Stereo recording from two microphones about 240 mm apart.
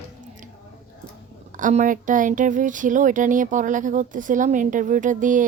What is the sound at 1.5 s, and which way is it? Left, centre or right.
Speech, right.